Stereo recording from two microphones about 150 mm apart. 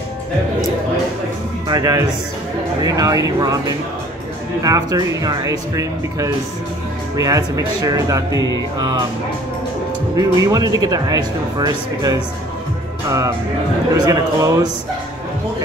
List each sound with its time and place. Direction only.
1.7 s speech: 25° right (ahead or behind)
4.6 s speech: 25° right (ahead or behind)
8.3 s music: 25° left (ahead or behind)
8.7 s speech: 30° right (ahead or behind)
10.1 s speech: 25° right (ahead or behind)
13.9 s speech: 25° right (ahead or behind)